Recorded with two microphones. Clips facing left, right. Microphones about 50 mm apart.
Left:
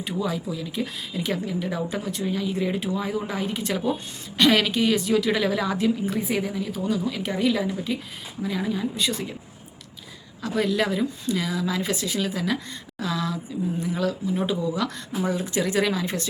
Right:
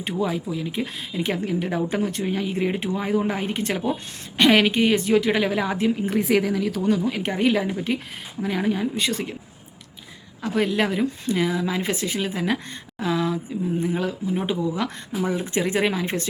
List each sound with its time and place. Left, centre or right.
0.0 s speech: right
6.2 s speech: right
6.8 s a woman's voice: right
10.4 s speech: right